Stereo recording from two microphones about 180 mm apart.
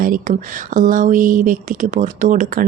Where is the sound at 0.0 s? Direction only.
50° right (ahead or behind).